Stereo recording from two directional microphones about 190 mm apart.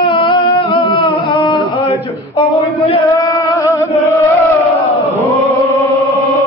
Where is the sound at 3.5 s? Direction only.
15° left (ahead or behind).